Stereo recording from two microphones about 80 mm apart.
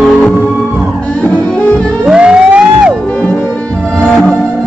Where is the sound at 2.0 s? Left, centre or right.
Centre.